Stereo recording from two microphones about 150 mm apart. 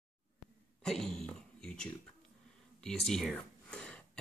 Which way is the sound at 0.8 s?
5° left (ahead or behind).